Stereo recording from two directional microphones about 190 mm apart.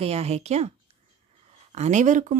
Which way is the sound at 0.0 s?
35° right (ahead or behind).